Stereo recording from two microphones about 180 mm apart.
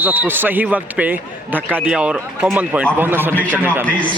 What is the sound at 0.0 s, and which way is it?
Speech, 10° right (ahead or behind).